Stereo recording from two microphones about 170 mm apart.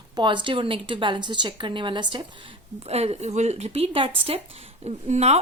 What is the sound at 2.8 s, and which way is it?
A woman's voice, 40° right (ahead or behind).